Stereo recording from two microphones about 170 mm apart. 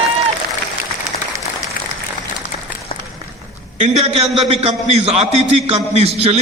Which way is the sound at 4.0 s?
35° right (ahead or behind).